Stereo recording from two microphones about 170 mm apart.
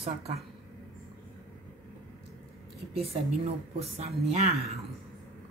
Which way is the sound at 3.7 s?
40° right (ahead or behind).